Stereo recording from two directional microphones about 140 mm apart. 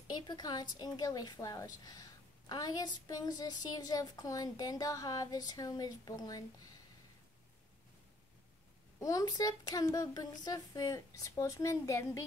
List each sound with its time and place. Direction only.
0.1 s a woman's voice: 30° left (ahead or behind)
9.0 s a woman's voice: 25° left (ahead or behind)